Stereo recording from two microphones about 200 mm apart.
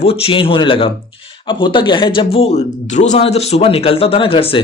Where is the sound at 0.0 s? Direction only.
30° left (ahead or behind).